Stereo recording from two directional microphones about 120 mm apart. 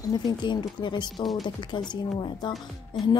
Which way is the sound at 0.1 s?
40° left (ahead or behind).